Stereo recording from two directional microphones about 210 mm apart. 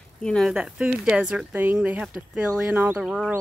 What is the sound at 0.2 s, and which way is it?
Speech, 5° left (ahead or behind).